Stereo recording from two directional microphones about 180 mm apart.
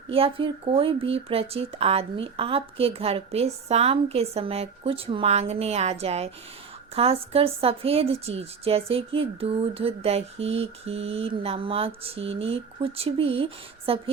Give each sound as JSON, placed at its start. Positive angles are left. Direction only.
{"t": 0.1, "sound": "speech", "side_deg": -30}